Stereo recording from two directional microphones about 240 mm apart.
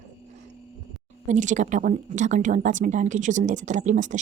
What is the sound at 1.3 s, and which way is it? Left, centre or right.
Speech, right.